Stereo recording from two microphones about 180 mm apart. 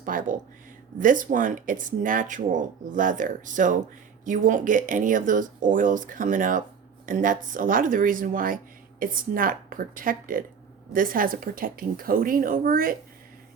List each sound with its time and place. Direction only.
0.0 s speech: 50° right (ahead or behind)